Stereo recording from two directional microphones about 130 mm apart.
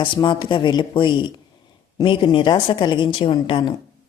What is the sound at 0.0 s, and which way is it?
Speech, 40° left (ahead or behind).